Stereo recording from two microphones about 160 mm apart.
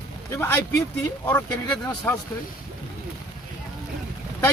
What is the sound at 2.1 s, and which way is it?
Speech, 15° left (ahead or behind).